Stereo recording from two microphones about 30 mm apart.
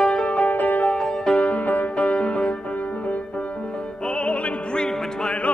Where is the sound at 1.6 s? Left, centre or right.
Left.